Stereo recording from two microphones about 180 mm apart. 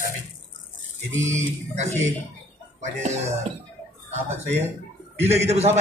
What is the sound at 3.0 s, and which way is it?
Speech, 35° right (ahead or behind).